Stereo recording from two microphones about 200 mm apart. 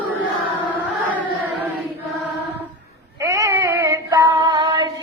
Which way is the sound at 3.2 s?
15° right (ahead or behind).